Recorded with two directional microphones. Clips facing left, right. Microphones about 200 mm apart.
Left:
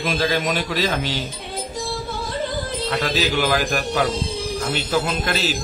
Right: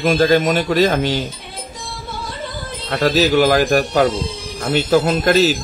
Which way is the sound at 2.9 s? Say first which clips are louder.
Right 8 dB; 45° right (ahead or behind).